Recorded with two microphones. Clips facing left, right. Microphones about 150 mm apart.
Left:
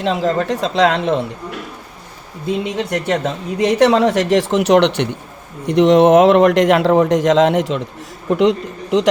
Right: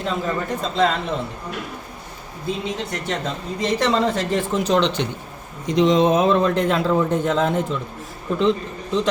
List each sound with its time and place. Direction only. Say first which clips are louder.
0.0 s speech: left 7 dB; 90° left
2.7 s speech: left 8 dB; 70° left (ahead or behind); by 7.8 s 85° left
8.3 s speech: left 5 dB; 70° left (ahead or behind)